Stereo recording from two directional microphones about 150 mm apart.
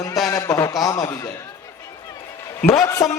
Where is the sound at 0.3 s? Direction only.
20° left (ahead or behind).